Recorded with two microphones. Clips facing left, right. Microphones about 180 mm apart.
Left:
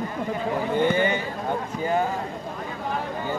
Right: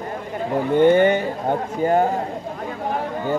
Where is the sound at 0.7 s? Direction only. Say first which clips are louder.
Right 9 dB; 55° right (ahead or behind).